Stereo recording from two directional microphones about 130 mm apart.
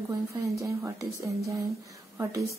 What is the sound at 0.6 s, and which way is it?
Speech, 25° right (ahead or behind).